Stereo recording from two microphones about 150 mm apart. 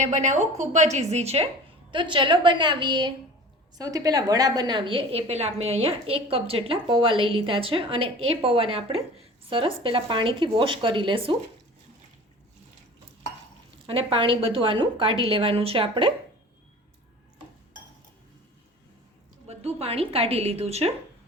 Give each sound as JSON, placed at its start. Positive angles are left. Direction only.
{"t": 0.0, "sound": "a woman's voice", "side_deg": -50}
{"t": 1.9, "sound": "a woman's voice", "side_deg": -35}
{"t": 13.8, "sound": "a woman's voice", "side_deg": -35}
{"t": 19.5, "sound": "a woman's voice", "side_deg": -45}